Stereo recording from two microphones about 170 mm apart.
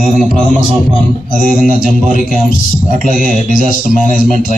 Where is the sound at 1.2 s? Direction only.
55° left (ahead or behind).